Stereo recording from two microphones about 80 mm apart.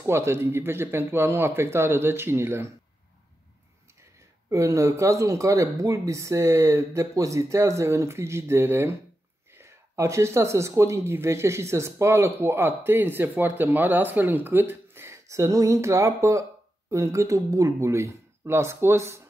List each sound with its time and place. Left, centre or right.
0.0 s speech: right
4.5 s speech: right